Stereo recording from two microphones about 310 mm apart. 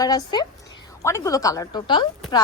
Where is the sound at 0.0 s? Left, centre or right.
Centre.